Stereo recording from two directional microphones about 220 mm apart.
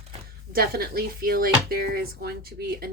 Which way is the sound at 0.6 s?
45° right (ahead or behind).